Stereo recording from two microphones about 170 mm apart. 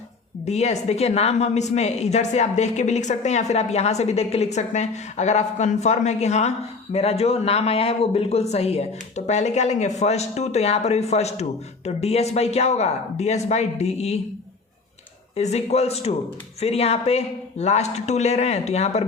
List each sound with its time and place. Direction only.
0.4 s a woman's voice: 40° left (ahead or behind)
15.4 s a woman's voice: 40° left (ahead or behind)